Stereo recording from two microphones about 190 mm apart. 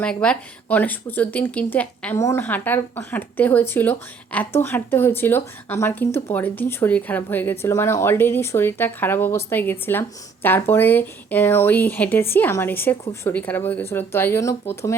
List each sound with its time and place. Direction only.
0.0 s speech: 5° left (ahead or behind)